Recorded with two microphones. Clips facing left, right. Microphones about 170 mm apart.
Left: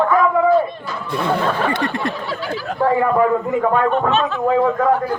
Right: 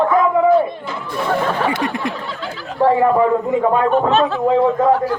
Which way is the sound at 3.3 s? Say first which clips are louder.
Right 2 dB; 15° right (ahead or behind).